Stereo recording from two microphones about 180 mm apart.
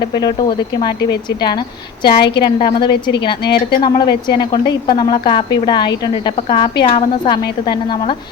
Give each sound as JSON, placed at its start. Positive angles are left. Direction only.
{"t": 0.0, "sound": "a woman's voice", "side_deg": 20}
{"t": 1.4, "sound": "a woman's voice", "side_deg": 25}
{"t": 2.9, "sound": "a woman's voice", "side_deg": 70}
{"t": 3.8, "sound": "a woman's voice", "side_deg": 25}